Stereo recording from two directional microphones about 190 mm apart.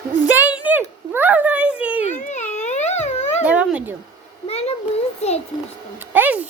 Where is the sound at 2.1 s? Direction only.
40° left (ahead or behind).